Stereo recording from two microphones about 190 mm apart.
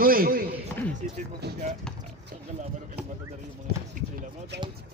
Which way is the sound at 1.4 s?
60° right (ahead or behind).